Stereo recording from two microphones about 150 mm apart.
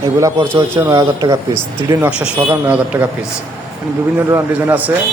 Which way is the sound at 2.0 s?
5° right (ahead or behind).